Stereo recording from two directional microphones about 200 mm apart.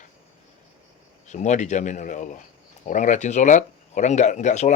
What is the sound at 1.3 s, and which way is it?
Speech, 35° left (ahead or behind).